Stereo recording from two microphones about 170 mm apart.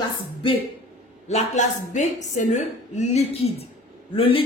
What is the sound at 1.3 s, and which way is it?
A woman's voice, 40° left (ahead or behind).